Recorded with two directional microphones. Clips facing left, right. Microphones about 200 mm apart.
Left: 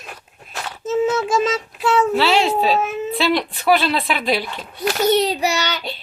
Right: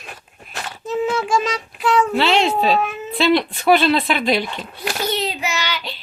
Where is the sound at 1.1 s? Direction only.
25° left (ahead or behind).